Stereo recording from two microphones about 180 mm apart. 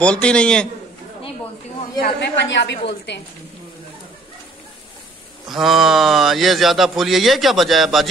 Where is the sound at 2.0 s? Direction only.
65° left (ahead or behind).